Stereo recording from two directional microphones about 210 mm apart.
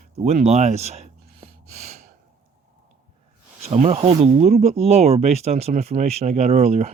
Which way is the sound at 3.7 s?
30° right (ahead or behind).